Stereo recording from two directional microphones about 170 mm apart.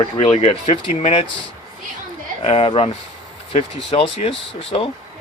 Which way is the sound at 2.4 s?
35° left (ahead or behind).